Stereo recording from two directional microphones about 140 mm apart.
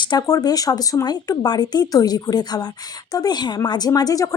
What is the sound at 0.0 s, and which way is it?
A woman's voice, 30° left (ahead or behind).